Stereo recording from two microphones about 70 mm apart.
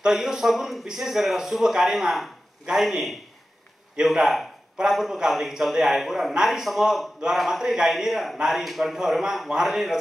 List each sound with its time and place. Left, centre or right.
0.0 s a man's voice: centre